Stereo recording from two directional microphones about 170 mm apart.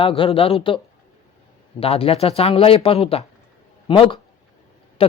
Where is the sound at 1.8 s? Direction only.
35° left (ahead or behind).